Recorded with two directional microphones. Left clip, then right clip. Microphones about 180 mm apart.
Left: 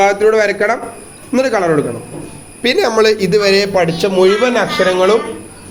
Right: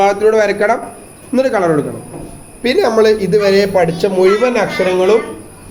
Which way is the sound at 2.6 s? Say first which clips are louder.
Right 1 dB; 15° left (ahead or behind).